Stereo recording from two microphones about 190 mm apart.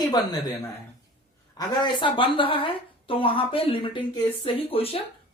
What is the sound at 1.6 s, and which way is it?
A woman's voice, 25° left (ahead or behind).